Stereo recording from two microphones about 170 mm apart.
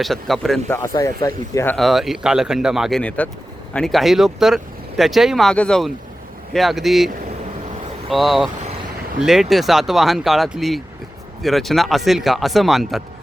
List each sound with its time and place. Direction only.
0.0 s speech: centre (ahead or behind)
0.7 s speech: 15° left (ahead or behind)
1.7 s speech: centre (ahead or behind)
8.1 s speech: centre (ahead or behind)